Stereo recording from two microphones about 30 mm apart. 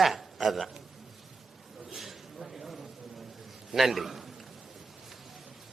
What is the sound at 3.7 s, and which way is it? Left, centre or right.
Speech, centre.